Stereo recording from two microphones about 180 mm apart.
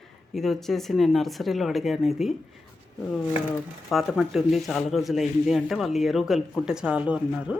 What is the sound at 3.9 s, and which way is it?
Speech, centre (ahead or behind).